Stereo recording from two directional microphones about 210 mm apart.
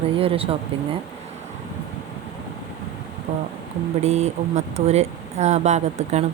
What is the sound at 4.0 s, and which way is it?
Speech, 30° right (ahead or behind).